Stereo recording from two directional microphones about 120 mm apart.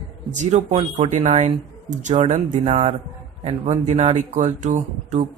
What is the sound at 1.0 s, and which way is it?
Speech, 75° right (ahead or behind).